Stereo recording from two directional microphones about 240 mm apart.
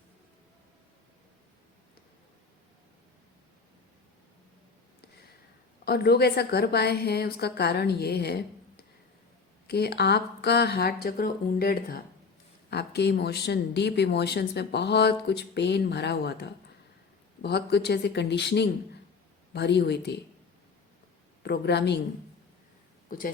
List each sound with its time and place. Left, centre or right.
5.8 s a woman's voice: left
21.4 s speech: left
23.0 s speech: left